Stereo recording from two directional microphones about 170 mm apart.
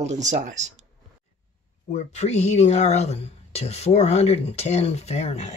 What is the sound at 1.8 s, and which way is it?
Speech, 40° left (ahead or behind).